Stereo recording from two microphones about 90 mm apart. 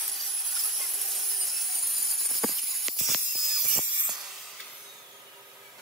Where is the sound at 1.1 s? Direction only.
Centre (ahead or behind).